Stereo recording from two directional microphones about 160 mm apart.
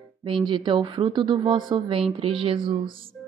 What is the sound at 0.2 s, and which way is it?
Speech, 30° right (ahead or behind).